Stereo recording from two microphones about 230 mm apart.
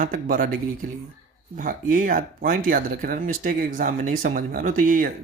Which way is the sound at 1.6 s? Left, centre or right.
Right.